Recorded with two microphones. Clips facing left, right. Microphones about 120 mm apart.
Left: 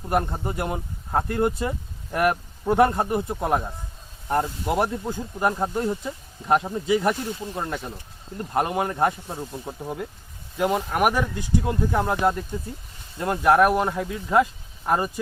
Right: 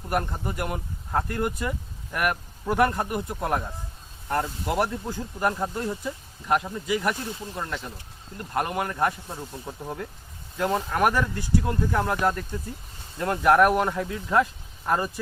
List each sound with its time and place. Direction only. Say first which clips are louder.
0.1 s speech: left 3 dB; 25° left (ahead or behind)
9.4 s speech: left 4 dB; 15° left (ahead or behind)